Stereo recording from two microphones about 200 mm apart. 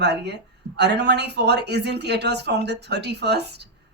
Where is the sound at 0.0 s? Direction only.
55° right (ahead or behind).